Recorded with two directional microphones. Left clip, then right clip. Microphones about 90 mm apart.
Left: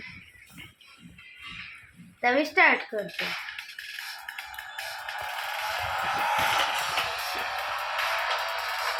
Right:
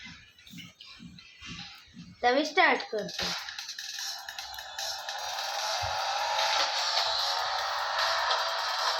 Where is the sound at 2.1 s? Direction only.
30° left (ahead or behind).